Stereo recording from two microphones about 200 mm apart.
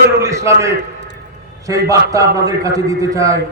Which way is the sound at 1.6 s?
15° right (ahead or behind).